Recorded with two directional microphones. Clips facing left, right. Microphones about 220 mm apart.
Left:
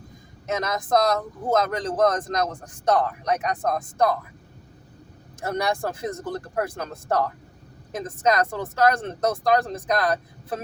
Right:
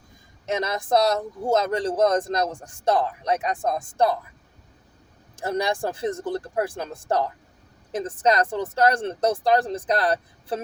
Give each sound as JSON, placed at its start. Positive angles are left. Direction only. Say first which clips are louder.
{"t": 0.4, "sound": "a man's voice", "louder": "right 1 dB", "side_deg": -30}
{"t": 5.4, "sound": "a man's voice", "louder": "right 1 dB", "side_deg": -30}